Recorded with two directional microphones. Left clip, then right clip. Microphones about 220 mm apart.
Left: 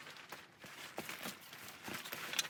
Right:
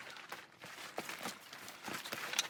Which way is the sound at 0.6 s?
15° right (ahead or behind).